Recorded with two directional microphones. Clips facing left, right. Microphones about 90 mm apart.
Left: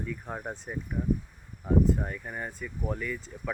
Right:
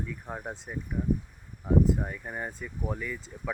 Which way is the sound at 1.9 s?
10° right (ahead or behind).